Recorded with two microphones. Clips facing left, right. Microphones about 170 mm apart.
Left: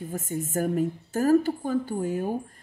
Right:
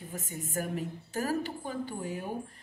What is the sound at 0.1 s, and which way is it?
Speech, 45° left (ahead or behind).